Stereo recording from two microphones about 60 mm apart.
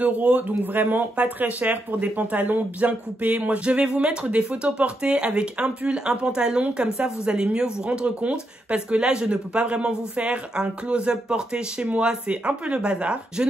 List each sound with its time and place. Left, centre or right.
0.0 s speech: right